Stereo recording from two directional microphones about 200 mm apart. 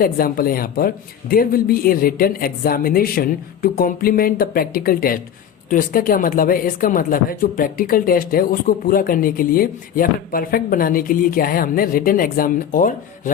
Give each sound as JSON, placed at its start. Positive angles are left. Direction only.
{"t": 0.0, "sound": "speech", "side_deg": 45}